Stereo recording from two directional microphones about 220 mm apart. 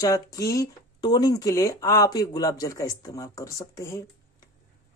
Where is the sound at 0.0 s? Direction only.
15° left (ahead or behind).